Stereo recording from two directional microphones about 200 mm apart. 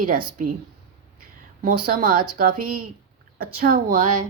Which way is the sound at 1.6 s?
45° right (ahead or behind).